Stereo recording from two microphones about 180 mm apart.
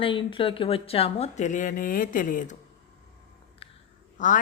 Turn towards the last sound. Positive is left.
turn(degrees=45)  # may be behind; listen again after turning